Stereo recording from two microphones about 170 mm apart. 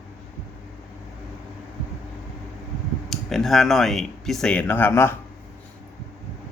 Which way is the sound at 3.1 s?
Centre (ahead or behind).